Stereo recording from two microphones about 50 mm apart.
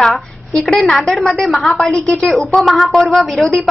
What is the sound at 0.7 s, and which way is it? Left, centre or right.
A woman's voice, centre.